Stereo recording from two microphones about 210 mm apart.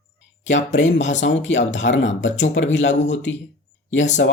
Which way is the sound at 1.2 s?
60° left (ahead or behind).